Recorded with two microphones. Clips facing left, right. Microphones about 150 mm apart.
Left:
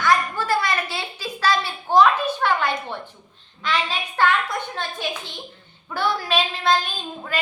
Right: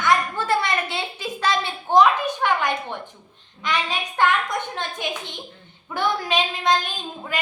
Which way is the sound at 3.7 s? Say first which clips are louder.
Even; 15° right (ahead or behind).